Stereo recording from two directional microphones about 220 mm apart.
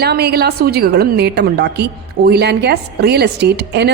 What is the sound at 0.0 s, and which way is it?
A woman's voice, 45° right (ahead or behind).